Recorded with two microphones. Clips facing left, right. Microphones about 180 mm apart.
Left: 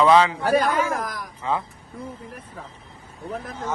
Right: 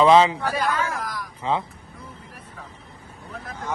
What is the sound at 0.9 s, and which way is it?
Speech, 50° left (ahead or behind).